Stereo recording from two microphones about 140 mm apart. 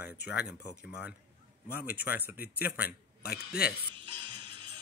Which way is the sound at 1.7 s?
90° left.